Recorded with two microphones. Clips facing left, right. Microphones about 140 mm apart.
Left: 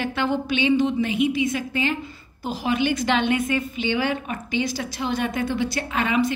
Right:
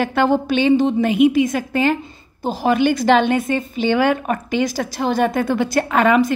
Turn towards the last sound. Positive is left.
turn(degrees=-55)  # may be behind; listen again after turning